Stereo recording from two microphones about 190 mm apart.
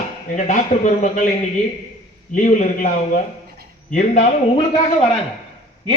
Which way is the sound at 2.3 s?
40° left (ahead or behind).